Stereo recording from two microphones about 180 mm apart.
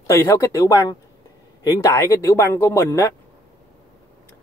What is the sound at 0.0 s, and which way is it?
Speech, 15° left (ahead or behind).